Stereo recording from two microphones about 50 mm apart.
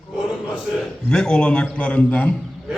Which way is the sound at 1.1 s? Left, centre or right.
Centre.